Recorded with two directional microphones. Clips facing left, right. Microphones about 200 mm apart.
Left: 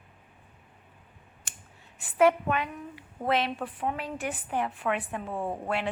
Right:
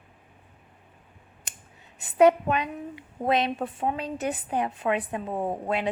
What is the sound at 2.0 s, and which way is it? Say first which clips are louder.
Speech: right 4 dB; 20° right (ahead or behind).